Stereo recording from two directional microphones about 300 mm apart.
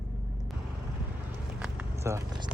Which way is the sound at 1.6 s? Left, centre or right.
Centre.